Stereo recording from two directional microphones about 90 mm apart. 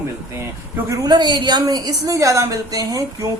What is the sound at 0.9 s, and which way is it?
Speech, 50° right (ahead or behind).